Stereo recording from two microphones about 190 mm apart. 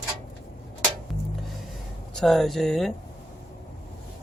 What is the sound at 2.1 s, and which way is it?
Speech, centre (ahead or behind).